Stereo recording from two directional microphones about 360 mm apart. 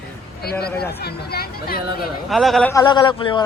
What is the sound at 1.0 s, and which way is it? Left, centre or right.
Speech, left.